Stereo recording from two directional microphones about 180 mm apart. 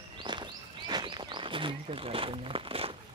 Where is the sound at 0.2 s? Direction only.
25° right (ahead or behind).